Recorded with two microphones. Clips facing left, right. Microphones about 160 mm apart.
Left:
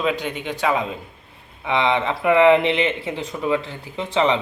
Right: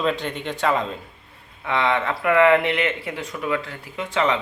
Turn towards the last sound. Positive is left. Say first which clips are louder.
# left 3 dB
turn(degrees=25)  # may be behind; listen again after turning